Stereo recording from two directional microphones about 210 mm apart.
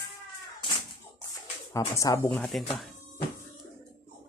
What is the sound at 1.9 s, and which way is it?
Speech, 15° left (ahead or behind).